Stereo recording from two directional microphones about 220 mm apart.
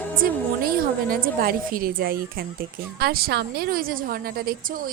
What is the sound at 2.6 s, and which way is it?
A woman's voice, 45° right (ahead or behind).